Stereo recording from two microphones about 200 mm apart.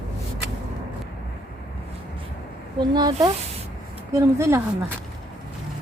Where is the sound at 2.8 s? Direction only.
20° right (ahead or behind).